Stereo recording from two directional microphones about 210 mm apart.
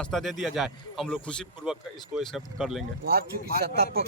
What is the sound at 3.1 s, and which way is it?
Speech, 45° right (ahead or behind).